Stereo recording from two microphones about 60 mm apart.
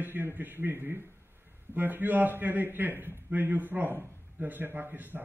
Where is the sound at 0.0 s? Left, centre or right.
Right.